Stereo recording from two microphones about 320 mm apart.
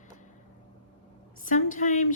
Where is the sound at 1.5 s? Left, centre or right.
Left.